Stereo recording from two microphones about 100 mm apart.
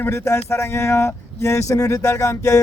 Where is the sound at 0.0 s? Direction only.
25° left (ahead or behind).